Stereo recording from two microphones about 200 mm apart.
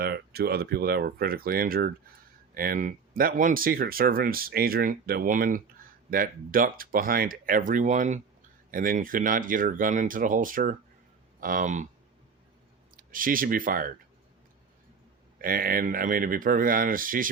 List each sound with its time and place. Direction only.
0.0 s speech: 50° right (ahead or behind)
13.0 s speech: 45° right (ahead or behind)
15.4 s speech: 45° right (ahead or behind)